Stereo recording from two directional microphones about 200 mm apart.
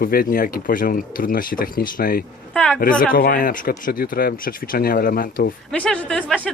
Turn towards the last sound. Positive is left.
turn(degrees=5)  # may be behind; listen again after turning